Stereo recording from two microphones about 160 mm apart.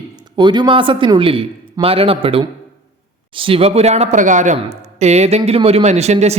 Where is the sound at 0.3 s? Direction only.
25° right (ahead or behind).